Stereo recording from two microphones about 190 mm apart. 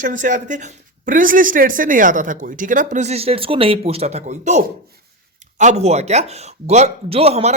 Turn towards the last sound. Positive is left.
turn(degrees=-35)  # may be behind; listen again after turning